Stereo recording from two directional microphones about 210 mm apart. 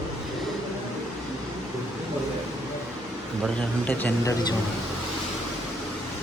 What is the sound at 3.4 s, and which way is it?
A man's voice, 5° left (ahead or behind).